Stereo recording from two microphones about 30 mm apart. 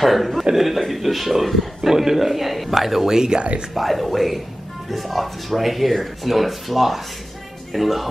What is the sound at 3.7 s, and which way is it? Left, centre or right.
A man's voice, centre.